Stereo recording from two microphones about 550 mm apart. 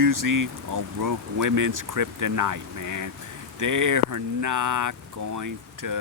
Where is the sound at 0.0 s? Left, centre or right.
Right.